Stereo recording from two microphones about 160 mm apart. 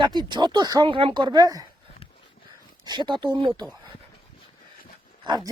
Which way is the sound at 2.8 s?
30° right (ahead or behind).